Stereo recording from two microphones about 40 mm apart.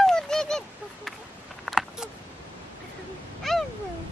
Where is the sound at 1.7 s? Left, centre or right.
Centre.